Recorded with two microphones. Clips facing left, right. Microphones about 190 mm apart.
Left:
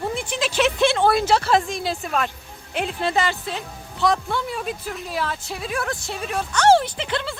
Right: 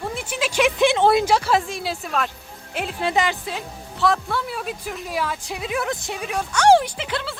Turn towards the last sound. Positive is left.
turn(degrees=-5)  # may be behind; listen again after turning